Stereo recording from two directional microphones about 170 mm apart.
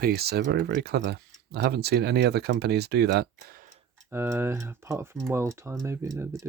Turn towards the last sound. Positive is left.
turn(degrees=-20)  # may be behind; listen again after turning